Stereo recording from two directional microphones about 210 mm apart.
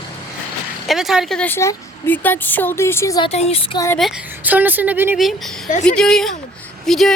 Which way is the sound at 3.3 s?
30° left (ahead or behind).